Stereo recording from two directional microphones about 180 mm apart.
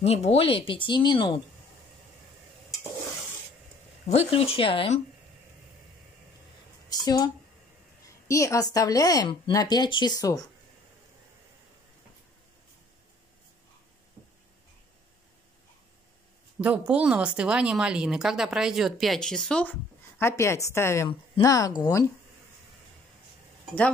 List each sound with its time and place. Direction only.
0.0 s a woman's voice: 35° left (ahead or behind)
4.0 s speech: 35° left (ahead or behind)
6.9 s speech: 20° left (ahead or behind)
8.3 s a woman's voice: 15° left (ahead or behind)
16.5 s a woman's voice: 10° right (ahead or behind)
20.2 s a woman's voice: 15° left (ahead or behind)